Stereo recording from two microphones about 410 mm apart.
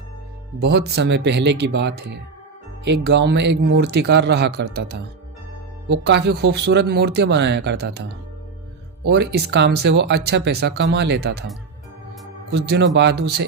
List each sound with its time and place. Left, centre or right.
0.6 s speech: right
12.5 s speech: right